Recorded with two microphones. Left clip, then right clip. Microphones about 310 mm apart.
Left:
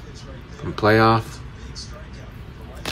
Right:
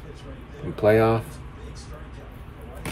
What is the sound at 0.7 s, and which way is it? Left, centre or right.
Speech, centre.